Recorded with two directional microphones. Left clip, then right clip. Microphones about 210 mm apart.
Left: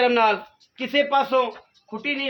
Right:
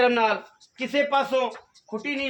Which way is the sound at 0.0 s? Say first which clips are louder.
Left 2 dB; 45° left (ahead or behind).